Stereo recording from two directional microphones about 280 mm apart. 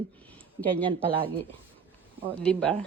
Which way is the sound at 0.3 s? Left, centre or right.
Centre.